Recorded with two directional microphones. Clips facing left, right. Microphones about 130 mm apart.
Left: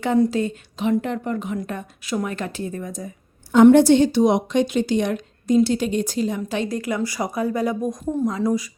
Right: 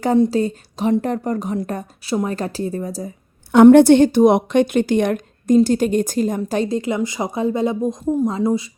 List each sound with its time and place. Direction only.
0.3 s speech: 35° right (ahead or behind)
3.5 s a woman's voice: 65° right (ahead or behind); by 6.7 s 45° right (ahead or behind)
6.7 s speech: 25° right (ahead or behind)